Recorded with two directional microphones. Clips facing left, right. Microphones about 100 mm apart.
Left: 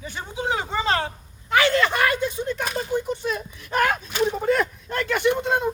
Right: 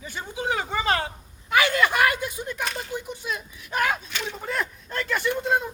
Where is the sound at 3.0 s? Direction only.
5° right (ahead or behind).